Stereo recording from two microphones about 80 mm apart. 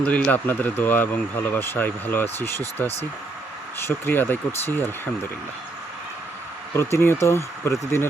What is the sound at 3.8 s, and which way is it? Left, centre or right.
Speech, left.